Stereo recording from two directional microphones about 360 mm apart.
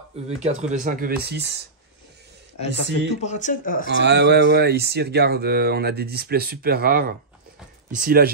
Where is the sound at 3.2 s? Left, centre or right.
Centre.